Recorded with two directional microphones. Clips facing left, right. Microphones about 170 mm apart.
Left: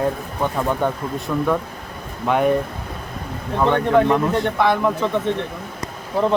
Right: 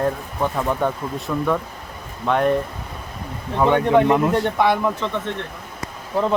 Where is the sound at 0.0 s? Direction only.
Centre (ahead or behind).